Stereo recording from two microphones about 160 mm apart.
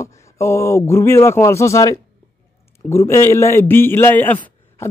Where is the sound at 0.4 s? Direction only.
15° left (ahead or behind).